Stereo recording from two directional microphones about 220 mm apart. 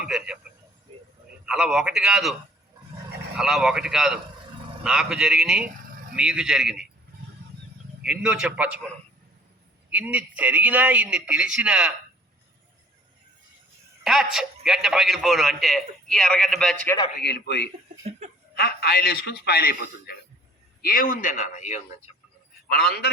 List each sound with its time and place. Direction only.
0.0 s speech: 5° right (ahead or behind)
0.9 s a sound: 25° right (ahead or behind)
1.5 s a man's voice: 5° right (ahead or behind)
3.3 s a man's voice: centre (ahead or behind)
8.0 s a man's voice: 5° right (ahead or behind)
9.9 s a man's voice: 5° right (ahead or behind)
14.0 s a man's voice: centre (ahead or behind)
17.2 s a man's voice: 50° left (ahead or behind)
18.2 s snicker: 30° right (ahead or behind)
18.5 s a man's voice: 45° left (ahead or behind)